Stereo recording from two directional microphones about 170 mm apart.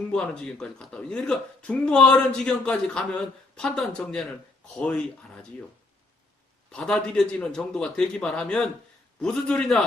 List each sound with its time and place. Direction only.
0.1 s speech: 5° left (ahead or behind)
6.7 s speech: 5° left (ahead or behind)